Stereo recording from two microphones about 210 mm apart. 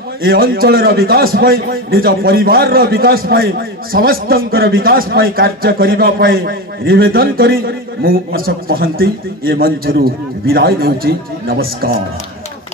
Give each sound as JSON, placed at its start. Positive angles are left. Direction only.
{"t": 0.2, "sound": "a man's voice", "side_deg": -45}